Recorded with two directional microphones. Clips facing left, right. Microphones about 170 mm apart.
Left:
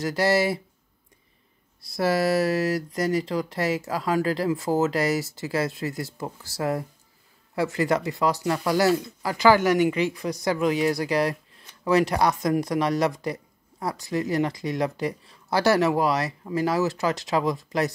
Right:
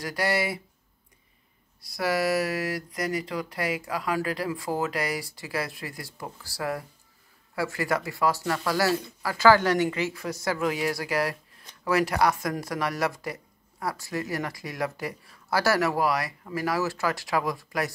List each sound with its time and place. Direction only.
0.0 s speech: 25° left (ahead or behind)
1.8 s speech: 25° left (ahead or behind)